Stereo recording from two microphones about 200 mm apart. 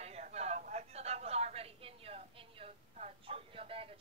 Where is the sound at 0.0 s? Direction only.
35° right (ahead or behind).